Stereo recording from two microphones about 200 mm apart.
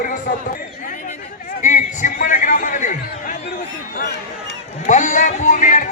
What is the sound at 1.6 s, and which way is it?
Music, 40° left (ahead or behind).